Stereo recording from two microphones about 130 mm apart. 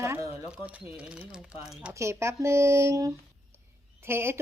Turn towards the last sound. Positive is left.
turn(degrees=-20)  # may be behind; listen again after turning